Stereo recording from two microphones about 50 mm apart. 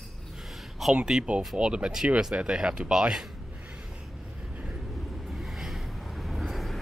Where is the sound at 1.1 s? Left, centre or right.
Right.